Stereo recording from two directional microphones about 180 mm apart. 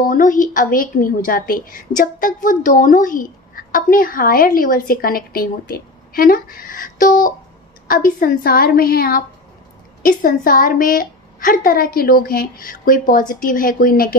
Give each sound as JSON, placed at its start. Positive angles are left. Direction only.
{"t": 0.0, "sound": "a woman's voice", "side_deg": 45}